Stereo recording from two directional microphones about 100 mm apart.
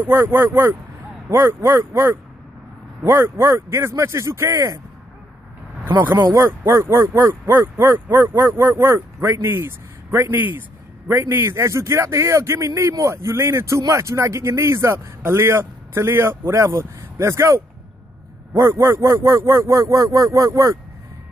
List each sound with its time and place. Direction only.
0.0 s a man's voice: 20° right (ahead or behind)
5.9 s a man's voice: 20° right (ahead or behind)